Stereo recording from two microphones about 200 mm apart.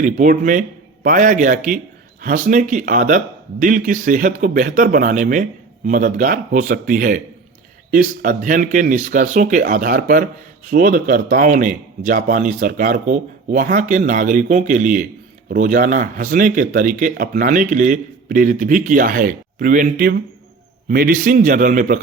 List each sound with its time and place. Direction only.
0.0 s speech: 40° right (ahead or behind)